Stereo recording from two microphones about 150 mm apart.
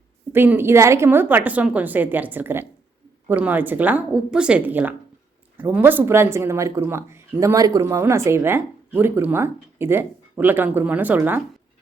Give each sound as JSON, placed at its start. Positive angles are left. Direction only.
{"t": 0.3, "sound": "speech", "side_deg": -15}